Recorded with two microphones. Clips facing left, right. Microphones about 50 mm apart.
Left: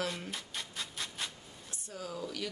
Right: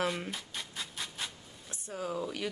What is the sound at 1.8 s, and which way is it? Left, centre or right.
Speech, right.